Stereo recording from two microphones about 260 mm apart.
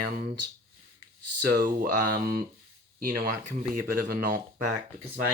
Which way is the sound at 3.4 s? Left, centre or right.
Right.